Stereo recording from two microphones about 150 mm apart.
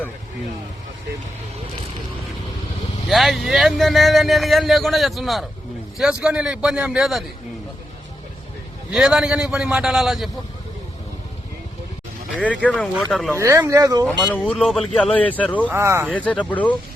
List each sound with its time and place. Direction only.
3.1 s speech: centre (ahead or behind)
8.9 s speech: 5° right (ahead or behind)
12.6 s speech: 5° left (ahead or behind)
13.3 s speech: 20° right (ahead or behind)
14.4 s speech: 5° right (ahead or behind)
14.8 s speech: 5° left (ahead or behind)
15.7 s speech: 15° right (ahead or behind)
16.1 s speech: 10° left (ahead or behind)